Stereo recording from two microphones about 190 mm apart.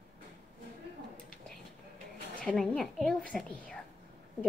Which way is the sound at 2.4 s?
Centre (ahead or behind).